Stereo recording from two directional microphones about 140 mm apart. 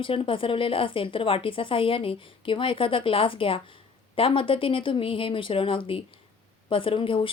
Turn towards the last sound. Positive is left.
turn(degrees=40)  # may be behind; listen again after turning